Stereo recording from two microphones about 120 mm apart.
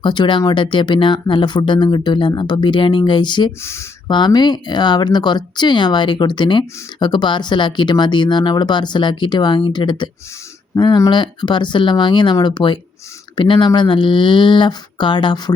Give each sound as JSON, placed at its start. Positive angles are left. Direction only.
{"t": 0.0, "sound": "speech", "side_deg": 40}
{"t": 3.6, "sound": "speech", "side_deg": 20}
{"t": 4.1, "sound": "speech", "side_deg": 35}